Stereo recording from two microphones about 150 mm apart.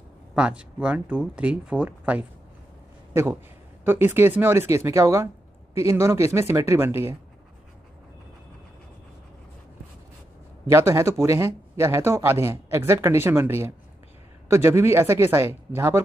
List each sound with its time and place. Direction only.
0.4 s speech: 5° right (ahead or behind)
10.7 s speech: 20° right (ahead or behind)